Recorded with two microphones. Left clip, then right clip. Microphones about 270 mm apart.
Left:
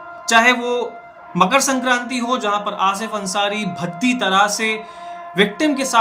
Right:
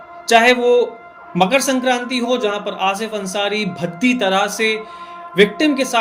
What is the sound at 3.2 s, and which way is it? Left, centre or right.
Speech, left.